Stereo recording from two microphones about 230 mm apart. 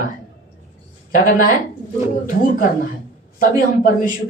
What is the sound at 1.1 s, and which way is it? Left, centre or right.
Speech, left.